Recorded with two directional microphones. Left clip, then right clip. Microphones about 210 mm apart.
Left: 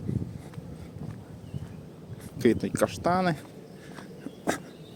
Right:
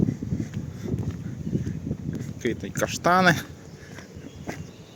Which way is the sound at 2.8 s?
5° left (ahead or behind).